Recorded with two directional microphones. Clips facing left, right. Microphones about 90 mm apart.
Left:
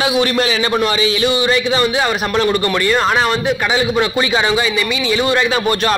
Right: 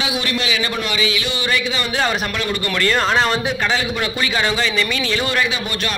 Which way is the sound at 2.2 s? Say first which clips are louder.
Left 7 dB; 35° left (ahead or behind).